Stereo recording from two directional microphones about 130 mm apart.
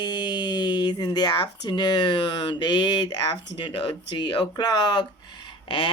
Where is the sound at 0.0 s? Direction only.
35° left (ahead or behind).